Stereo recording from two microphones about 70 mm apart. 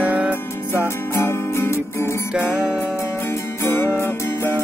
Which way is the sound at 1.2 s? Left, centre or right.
Left.